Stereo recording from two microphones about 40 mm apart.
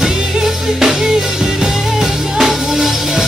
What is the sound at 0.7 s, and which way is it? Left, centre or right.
Music, centre.